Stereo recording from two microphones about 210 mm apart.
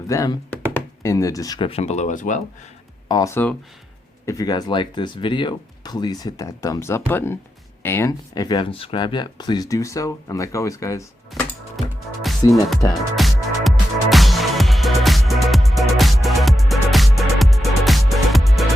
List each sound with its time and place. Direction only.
0.1 s speech: 15° left (ahead or behind); by 2.4 s 35° left (ahead or behind)
3.1 s speech: 15° left (ahead or behind)
11.3 s music: centre (ahead or behind)
12.2 s speech: centre (ahead or behind)
12.9 s music: centre (ahead or behind)